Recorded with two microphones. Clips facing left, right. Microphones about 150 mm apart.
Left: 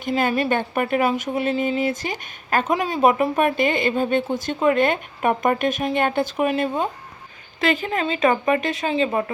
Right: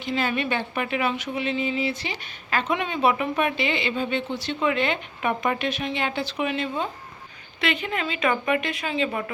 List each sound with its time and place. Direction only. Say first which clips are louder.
0.0 s a woman's voice: left 5 dB; 45° left (ahead or behind)